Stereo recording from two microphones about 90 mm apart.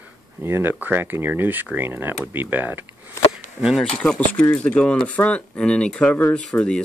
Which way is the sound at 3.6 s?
5° right (ahead or behind).